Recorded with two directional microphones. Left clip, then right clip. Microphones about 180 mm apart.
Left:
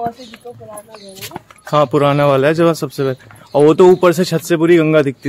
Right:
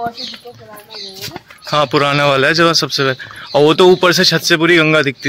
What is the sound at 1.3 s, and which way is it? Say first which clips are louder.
Speech: left 1 dB; 15° left (ahead or behind).